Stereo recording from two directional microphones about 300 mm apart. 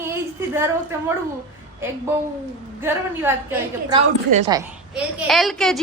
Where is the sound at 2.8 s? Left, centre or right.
Centre.